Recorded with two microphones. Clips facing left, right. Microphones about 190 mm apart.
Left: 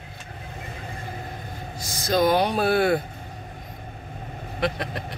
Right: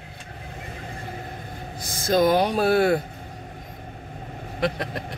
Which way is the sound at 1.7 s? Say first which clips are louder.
Right 2 dB; 55° right (ahead or behind).